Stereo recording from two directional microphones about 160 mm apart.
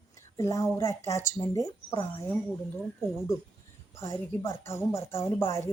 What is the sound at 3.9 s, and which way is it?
Speech, 15° left (ahead or behind).